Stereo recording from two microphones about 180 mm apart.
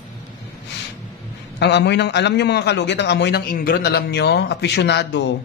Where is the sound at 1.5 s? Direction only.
70° left (ahead or behind).